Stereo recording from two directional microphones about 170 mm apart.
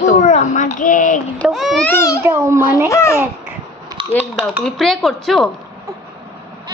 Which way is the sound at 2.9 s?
15° left (ahead or behind).